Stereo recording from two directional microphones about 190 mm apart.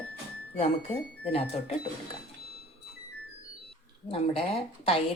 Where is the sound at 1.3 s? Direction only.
30° left (ahead or behind).